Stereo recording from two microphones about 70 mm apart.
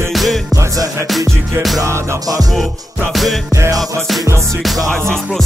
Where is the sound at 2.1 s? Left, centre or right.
Right.